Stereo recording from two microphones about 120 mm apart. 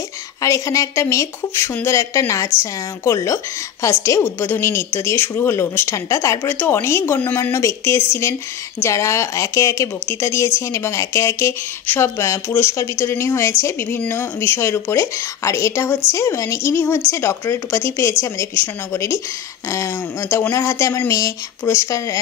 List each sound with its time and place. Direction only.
0.4 s a woman's voice: 25° left (ahead or behind)